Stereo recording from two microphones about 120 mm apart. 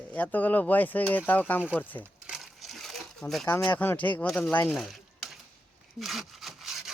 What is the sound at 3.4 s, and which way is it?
Speech, 15° left (ahead or behind).